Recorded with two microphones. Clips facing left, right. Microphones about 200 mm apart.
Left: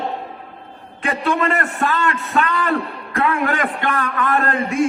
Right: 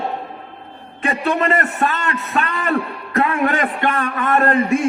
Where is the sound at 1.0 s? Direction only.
25° right (ahead or behind).